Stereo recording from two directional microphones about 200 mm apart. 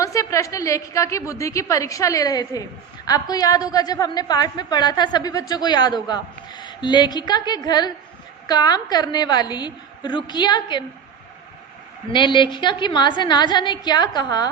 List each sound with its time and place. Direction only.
0.0 s a woman's voice: 15° left (ahead or behind)
12.1 s a woman's voice: 25° left (ahead or behind)